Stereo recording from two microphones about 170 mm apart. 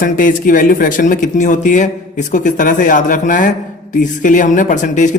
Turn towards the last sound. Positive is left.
turn(degrees=45)  # may be behind; listen again after turning